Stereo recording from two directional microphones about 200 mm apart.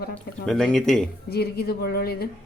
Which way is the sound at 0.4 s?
Centre (ahead or behind).